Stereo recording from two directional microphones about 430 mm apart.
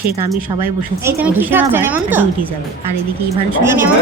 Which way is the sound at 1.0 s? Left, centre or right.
Centre.